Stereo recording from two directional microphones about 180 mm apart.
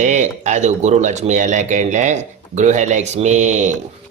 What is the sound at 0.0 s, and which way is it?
Speech, 40° right (ahead or behind).